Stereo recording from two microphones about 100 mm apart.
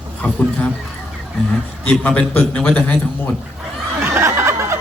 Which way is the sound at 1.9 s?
15° left (ahead or behind).